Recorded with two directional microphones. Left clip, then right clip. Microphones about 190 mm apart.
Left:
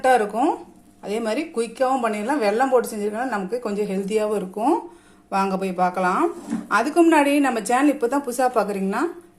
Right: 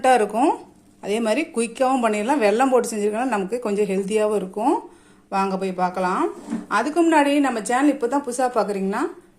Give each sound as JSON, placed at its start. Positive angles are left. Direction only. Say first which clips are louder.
{"t": 0.0, "sound": "a woman's voice", "louder": "right 1 dB", "side_deg": -20}